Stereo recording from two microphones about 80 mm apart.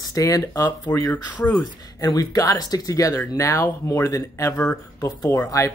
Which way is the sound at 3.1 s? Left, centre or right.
Left.